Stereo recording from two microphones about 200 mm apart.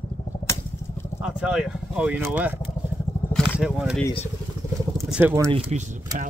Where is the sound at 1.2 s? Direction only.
5° right (ahead or behind).